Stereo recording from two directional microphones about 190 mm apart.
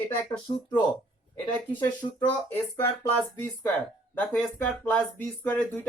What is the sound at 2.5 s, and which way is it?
Speech, 10° left (ahead or behind).